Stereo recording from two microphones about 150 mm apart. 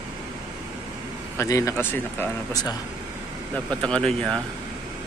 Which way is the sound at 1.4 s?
20° left (ahead or behind).